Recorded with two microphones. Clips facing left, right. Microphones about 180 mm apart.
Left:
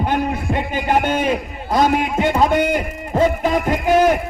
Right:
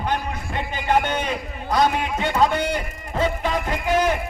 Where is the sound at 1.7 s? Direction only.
45° left (ahead or behind).